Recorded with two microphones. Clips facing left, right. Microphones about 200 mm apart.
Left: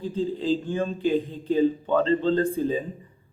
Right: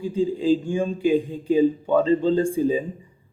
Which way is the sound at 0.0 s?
10° right (ahead or behind).